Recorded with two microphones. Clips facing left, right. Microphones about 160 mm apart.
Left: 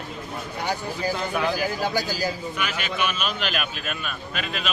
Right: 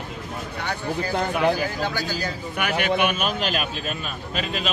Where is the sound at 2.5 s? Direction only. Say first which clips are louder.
Right 5 dB; 60° right (ahead or behind).